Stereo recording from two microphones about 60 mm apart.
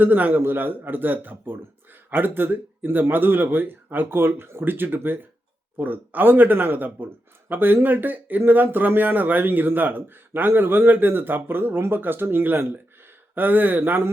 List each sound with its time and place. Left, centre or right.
0.0 s a man's voice: right